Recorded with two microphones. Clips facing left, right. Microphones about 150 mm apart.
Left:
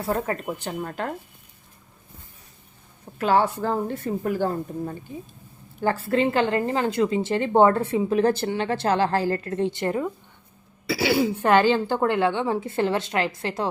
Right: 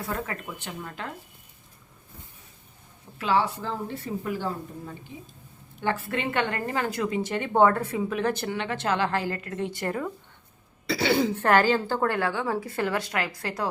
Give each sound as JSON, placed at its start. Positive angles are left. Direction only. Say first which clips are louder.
{"t": 0.1, "sound": "a woman's voice", "louder": "left 9 dB", "side_deg": 40}
{"t": 3.2, "sound": "speech", "louder": "left 4 dB", "side_deg": 45}
{"t": 5.8, "sound": "a woman's voice", "louder": "left 6 dB", "side_deg": 35}
{"t": 10.8, "sound": "a woman's voice", "louder": "left 2 dB", "side_deg": 5}